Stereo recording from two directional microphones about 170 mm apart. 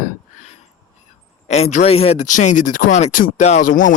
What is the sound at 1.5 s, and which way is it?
Speech, 45° left (ahead or behind).